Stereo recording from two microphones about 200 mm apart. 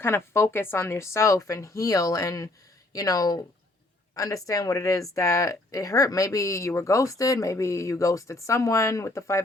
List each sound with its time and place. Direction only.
0.0 s speech: 10° left (ahead or behind)